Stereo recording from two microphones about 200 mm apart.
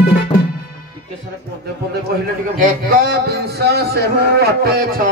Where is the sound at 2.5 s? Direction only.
45° right (ahead or behind).